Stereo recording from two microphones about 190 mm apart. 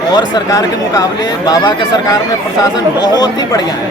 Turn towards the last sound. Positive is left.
turn(degrees=20)  # may be behind; listen again after turning